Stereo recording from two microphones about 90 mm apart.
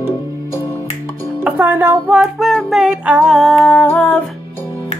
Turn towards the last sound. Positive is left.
turn(degrees=20)  # may be behind; listen again after turning